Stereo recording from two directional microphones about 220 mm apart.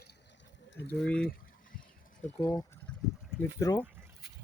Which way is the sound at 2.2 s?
25° left (ahead or behind).